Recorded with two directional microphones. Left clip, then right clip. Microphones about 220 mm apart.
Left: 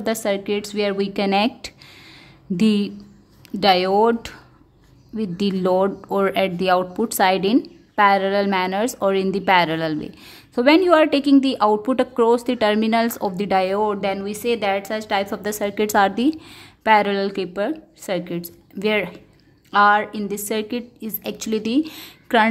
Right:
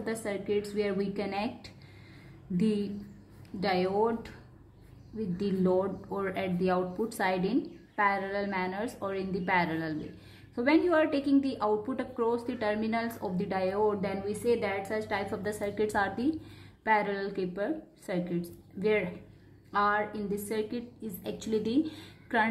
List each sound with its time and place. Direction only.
0.0 s a woman's voice: 50° left (ahead or behind)